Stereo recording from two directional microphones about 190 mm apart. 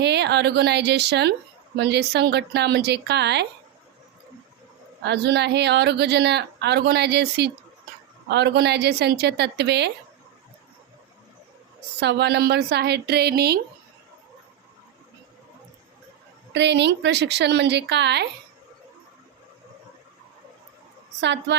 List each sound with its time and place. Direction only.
0.0 s a woman's voice: 60° right (ahead or behind)
5.0 s a woman's voice: 60° right (ahead or behind)
11.9 s a woman's voice: 65° right (ahead or behind)
16.5 s a woman's voice: 65° right (ahead or behind)
21.2 s a woman's voice: 65° right (ahead or behind)